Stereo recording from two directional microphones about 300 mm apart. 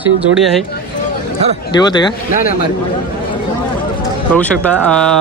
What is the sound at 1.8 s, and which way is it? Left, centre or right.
Speech, centre.